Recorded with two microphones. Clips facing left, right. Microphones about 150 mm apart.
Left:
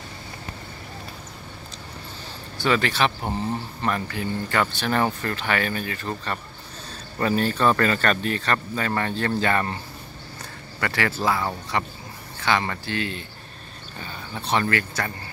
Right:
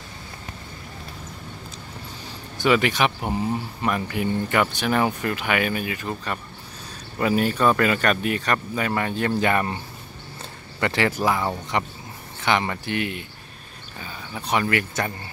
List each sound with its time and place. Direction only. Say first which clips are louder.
2.6 s speech: right 2 dB; 15° right (ahead or behind)
10.8 s speech: right 3 dB; 20° right (ahead or behind)